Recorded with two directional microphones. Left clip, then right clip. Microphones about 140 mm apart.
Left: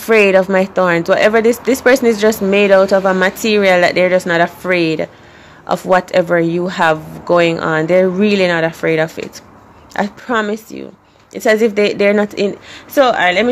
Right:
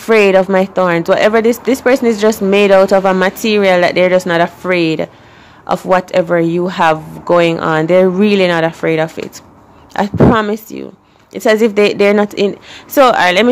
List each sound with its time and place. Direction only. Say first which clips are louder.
0.0 s speech: right 1 dB; 15° right (ahead or behind)
13.0 s speech: right 3 dB; 30° right (ahead or behind)